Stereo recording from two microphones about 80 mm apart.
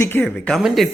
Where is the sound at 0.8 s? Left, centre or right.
Centre.